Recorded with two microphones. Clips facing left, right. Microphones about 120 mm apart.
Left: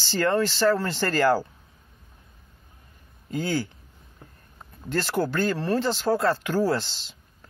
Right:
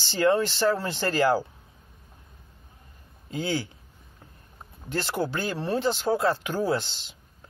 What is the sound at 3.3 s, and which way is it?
Speech, 20° right (ahead or behind).